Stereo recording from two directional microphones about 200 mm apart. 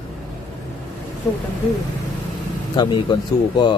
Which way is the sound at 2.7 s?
20° left (ahead or behind).